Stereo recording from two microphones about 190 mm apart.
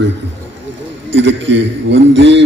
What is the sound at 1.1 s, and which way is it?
A man's voice, 70° right (ahead or behind).